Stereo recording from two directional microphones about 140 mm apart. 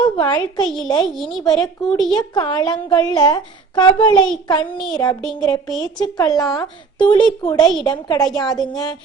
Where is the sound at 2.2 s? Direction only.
30° left (ahead or behind).